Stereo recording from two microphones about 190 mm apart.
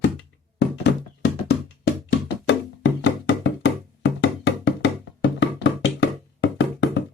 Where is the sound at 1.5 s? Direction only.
65° left (ahead or behind).